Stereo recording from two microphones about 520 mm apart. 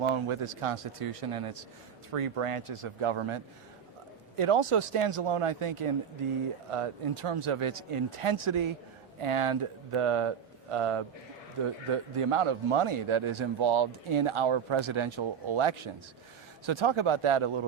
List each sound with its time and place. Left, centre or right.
0.0 s speech: right
9.2 s speech: right
12.1 s speech: right